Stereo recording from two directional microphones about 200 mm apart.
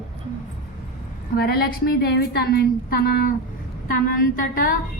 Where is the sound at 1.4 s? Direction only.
50° left (ahead or behind).